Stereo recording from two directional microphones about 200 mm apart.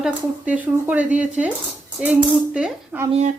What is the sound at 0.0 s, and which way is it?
Speech, 5° right (ahead or behind).